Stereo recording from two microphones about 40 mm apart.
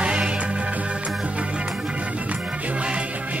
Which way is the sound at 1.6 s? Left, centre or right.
Centre.